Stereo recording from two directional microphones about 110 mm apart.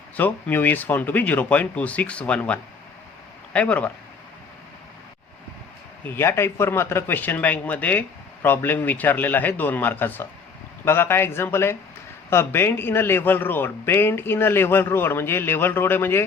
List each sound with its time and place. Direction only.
0.2 s speech: 15° left (ahead or behind)
6.1 s a man's voice: 20° left (ahead or behind)